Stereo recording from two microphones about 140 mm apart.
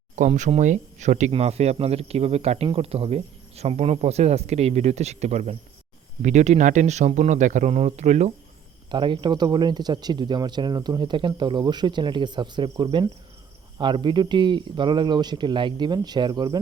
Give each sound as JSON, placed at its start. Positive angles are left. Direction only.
{"t": 0.2, "sound": "speech", "side_deg": -60}
{"t": 8.9, "sound": "speech", "side_deg": -35}